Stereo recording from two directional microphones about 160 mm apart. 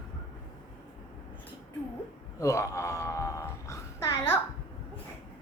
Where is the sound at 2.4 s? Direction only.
20° left (ahead or behind).